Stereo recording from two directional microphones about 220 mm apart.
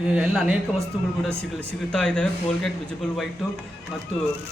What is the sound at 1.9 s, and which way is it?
Speech, 5° left (ahead or behind).